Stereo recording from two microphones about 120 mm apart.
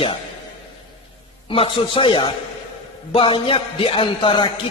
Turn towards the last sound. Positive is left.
turn(degrees=45)  # may be behind; listen again after turning